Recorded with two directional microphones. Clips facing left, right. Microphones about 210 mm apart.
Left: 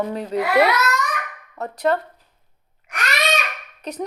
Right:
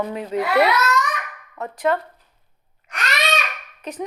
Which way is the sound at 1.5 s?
40° left (ahead or behind).